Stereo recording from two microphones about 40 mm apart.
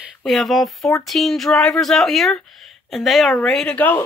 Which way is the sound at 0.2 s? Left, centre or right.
Centre.